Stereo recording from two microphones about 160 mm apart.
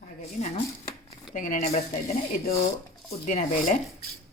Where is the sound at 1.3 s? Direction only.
55° left (ahead or behind).